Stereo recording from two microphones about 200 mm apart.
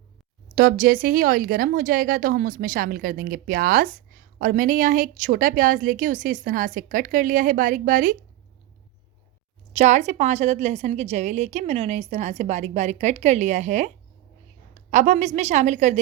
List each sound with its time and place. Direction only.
0.5 s speech: 45° right (ahead or behind)
9.7 s a woman's voice: 35° right (ahead or behind)